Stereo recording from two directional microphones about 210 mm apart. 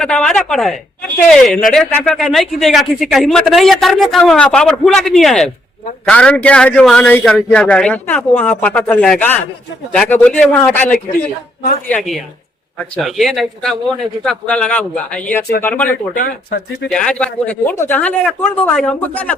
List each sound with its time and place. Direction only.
0.0 s a man's voice: 5° left (ahead or behind)
13.0 s a man's voice: centre (ahead or behind)
16.1 s speech: 45° left (ahead or behind)
16.9 s speech: 5° left (ahead or behind)